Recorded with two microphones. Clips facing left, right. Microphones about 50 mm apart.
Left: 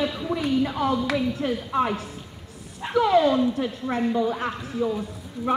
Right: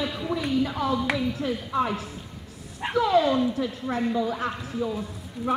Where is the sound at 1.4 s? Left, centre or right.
Left.